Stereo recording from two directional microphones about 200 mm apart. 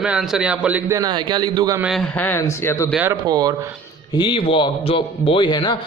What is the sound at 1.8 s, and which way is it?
Speech, centre (ahead or behind).